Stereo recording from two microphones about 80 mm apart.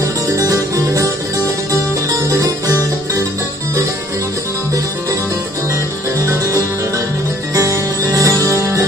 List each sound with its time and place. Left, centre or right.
0.0 s music: right
7.5 s music: right